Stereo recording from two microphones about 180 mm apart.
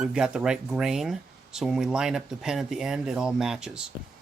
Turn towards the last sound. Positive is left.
turn(degrees=-5)  # may be behind; listen again after turning